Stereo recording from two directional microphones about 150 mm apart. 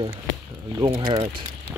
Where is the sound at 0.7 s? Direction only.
25° right (ahead or behind).